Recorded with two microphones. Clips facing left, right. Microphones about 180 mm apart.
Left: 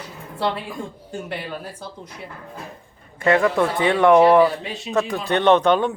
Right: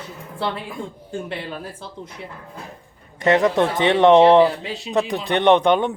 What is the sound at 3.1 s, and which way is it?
Speech, 20° right (ahead or behind).